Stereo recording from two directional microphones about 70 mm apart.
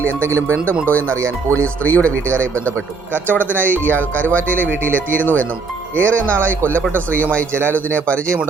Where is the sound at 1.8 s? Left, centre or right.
Left.